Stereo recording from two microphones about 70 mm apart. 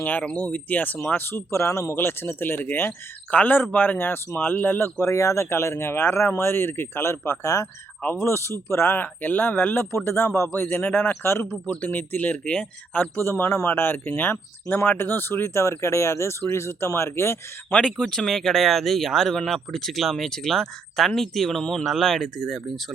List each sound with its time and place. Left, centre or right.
0.0 s speech: left
5.1 s speech: left
8.0 s speech: left
11.6 s speech: left
12.5 s speech: centre
13.0 s speech: left
17.8 s speech: centre